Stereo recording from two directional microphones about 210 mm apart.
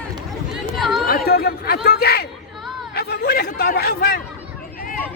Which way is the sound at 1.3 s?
45° left (ahead or behind).